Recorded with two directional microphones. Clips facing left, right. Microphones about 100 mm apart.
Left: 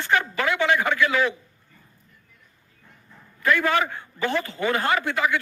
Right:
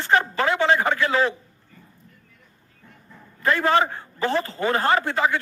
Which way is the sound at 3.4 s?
30° right (ahead or behind).